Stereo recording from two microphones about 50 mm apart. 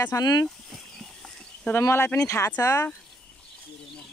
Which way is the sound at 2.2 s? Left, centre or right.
Left.